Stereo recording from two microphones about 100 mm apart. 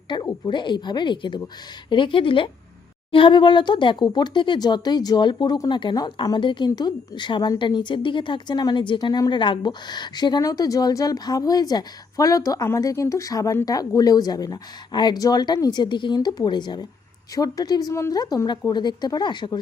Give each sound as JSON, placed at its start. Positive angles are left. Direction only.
{"t": 0.1, "sound": "speech", "side_deg": 55}
{"t": 15.8, "sound": "speech", "side_deg": 50}